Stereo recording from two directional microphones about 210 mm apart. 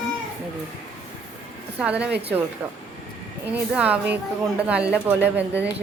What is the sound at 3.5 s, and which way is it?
Speech, 5° right (ahead or behind).